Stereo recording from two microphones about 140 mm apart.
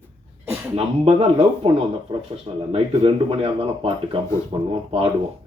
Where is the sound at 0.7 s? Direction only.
40° right (ahead or behind).